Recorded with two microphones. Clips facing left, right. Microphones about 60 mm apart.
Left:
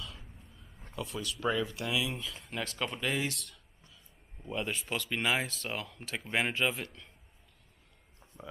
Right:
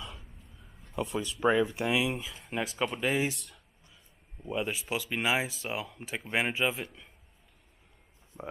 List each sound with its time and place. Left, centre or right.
0.9 s speech: right
2.2 s speech: centre
3.3 s speech: centre
8.3 s speech: centre